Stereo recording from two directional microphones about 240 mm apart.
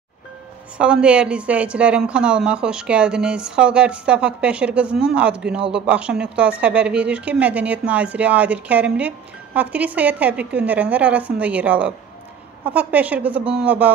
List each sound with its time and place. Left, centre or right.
0.7 s speech: centre